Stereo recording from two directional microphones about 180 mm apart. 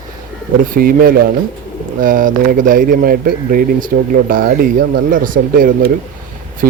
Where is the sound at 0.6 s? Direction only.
50° right (ahead or behind).